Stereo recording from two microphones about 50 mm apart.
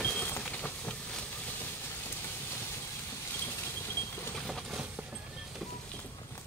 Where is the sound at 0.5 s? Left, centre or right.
Left.